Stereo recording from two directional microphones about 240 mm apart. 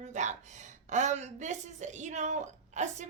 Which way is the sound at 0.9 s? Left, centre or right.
Right.